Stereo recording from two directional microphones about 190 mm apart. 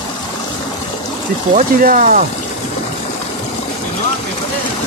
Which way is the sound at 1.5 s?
45° right (ahead or behind).